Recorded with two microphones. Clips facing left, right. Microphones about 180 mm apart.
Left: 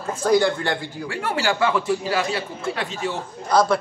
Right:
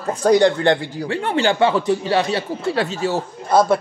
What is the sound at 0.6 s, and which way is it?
Speech, 30° right (ahead or behind).